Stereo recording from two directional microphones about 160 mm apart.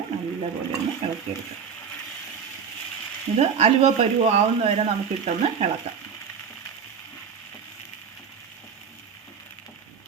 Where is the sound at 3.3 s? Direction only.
40° right (ahead or behind).